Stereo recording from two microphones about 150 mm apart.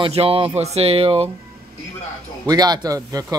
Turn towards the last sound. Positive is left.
turn(degrees=-25)  # may be behind; listen again after turning